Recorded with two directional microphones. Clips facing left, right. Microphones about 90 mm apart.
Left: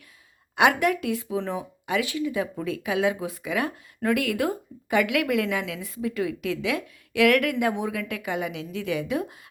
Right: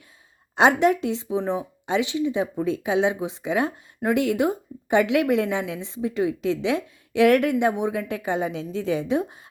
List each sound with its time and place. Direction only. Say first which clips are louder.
0.5 s speech: right 3 dB; 25° right (ahead or behind)